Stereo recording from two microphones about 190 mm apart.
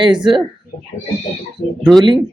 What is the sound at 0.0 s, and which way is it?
Speech, 25° right (ahead or behind).